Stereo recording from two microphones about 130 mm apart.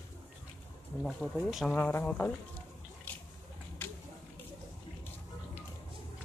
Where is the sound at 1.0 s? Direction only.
Centre (ahead or behind).